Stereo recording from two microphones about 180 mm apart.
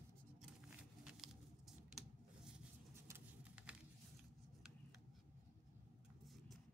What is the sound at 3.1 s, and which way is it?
Patter, 5° right (ahead or behind).